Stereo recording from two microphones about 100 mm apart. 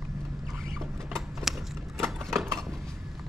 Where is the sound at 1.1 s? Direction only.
Centre (ahead or behind).